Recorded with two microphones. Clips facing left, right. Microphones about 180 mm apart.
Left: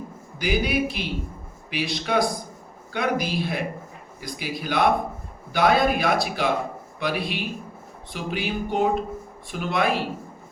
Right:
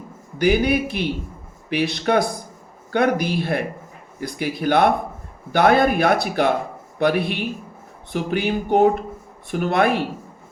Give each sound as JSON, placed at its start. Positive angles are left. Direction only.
{"t": 0.3, "sound": "speech", "side_deg": -60}